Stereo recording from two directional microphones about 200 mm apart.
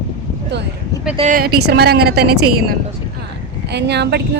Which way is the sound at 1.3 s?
50° right (ahead or behind).